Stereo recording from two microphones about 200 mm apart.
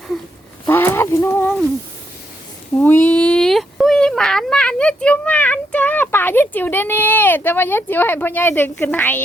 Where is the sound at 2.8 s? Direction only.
10° left (ahead or behind).